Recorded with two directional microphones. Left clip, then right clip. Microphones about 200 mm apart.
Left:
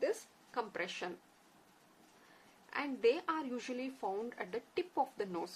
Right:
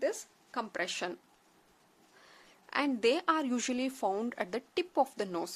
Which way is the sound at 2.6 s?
60° right (ahead or behind).